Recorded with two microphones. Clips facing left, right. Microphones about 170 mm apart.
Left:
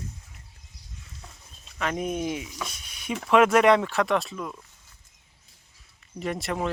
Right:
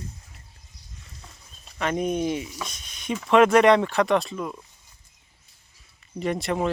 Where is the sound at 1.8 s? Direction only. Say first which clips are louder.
Right 3 dB; centre (ahead or behind).